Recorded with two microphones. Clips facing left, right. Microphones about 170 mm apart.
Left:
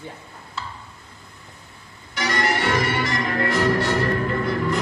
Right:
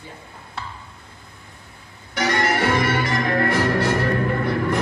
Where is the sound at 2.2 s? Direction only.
55° right (ahead or behind).